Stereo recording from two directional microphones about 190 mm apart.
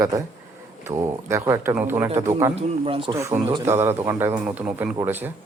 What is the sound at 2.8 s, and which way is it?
Speech, 30° right (ahead or behind).